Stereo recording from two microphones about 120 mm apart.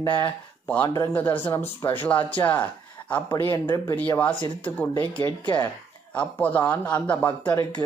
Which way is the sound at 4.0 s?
15° left (ahead or behind).